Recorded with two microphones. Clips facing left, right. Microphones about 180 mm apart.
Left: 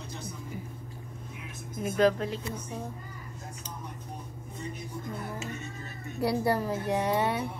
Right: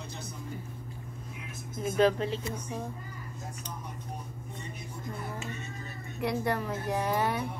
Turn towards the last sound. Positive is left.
turn(degrees=25)  # may be behind; listen again after turning